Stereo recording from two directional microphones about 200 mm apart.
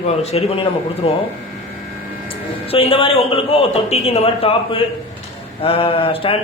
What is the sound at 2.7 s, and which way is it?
A man's voice, 25° left (ahead or behind).